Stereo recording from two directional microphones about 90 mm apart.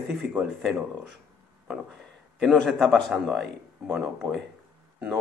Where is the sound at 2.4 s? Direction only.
5° left (ahead or behind).